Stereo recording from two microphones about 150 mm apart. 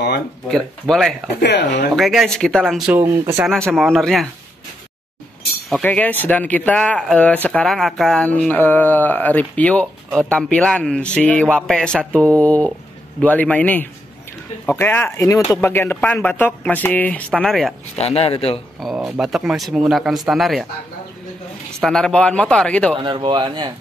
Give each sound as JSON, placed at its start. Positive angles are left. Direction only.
{"t": 0.5, "sound": "speech", "side_deg": 5}
{"t": 3.0, "sound": "speech", "side_deg": -15}
{"t": 3.4, "sound": "speech", "side_deg": 0}
{"t": 5.7, "sound": "speech", "side_deg": 10}
{"t": 17.9, "sound": "a man's voice", "side_deg": 40}
{"t": 18.8, "sound": "speech", "side_deg": 0}
{"t": 21.8, "sound": "speech", "side_deg": 5}
{"t": 22.9, "sound": "speech", "side_deg": -35}